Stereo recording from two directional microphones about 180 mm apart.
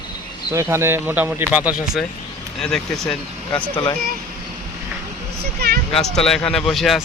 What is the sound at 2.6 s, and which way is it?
Speech, 5° left (ahead or behind).